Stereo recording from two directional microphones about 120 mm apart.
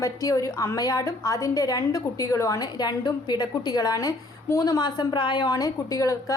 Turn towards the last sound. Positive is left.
turn(degrees=30)  # may be behind; listen again after turning